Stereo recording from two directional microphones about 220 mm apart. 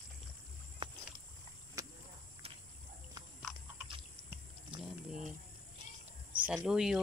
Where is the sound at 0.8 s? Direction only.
25° right (ahead or behind).